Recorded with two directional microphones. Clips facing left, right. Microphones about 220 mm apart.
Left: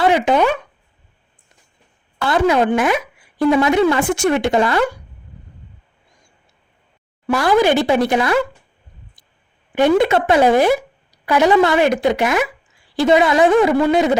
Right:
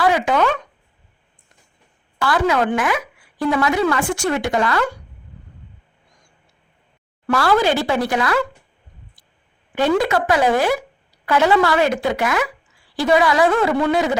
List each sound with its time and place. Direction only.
0.0 s a sound: 25° left (ahead or behind)
2.2 s speech: 25° left (ahead or behind)
7.3 s speech: 15° left (ahead or behind)
9.7 s speech: 20° left (ahead or behind)